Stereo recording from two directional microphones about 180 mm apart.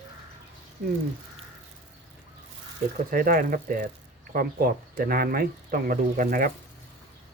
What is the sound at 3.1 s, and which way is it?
Speech, 50° right (ahead or behind).